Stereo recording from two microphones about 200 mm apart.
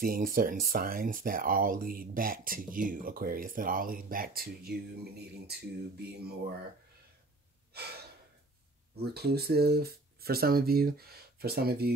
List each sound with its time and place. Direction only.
0.0 s speech: 45° right (ahead or behind)
7.7 s gasp: 55° right (ahead or behind)
8.9 s speech: 50° right (ahead or behind)